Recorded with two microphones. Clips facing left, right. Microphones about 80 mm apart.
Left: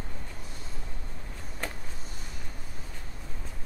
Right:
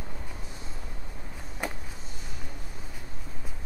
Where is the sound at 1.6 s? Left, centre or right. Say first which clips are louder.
Right 3 dB; centre.